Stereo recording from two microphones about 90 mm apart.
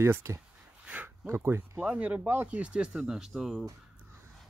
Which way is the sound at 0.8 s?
15° right (ahead or behind).